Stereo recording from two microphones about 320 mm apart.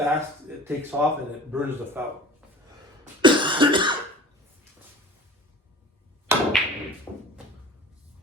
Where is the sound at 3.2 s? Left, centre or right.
Centre.